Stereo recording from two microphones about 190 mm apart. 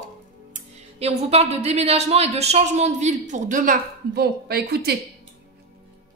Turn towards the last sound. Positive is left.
turn(degrees=-55)  # may be behind; listen again after turning